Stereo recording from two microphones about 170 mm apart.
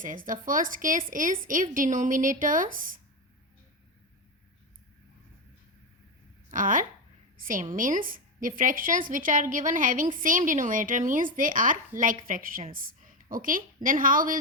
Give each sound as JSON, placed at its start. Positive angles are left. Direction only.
{"t": 0.0, "sound": "a woman's voice", "side_deg": -50}
{"t": 6.5, "sound": "a woman's voice", "side_deg": -50}